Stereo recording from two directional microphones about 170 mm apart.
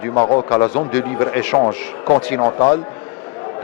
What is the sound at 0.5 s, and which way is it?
A man's voice, 10° left (ahead or behind).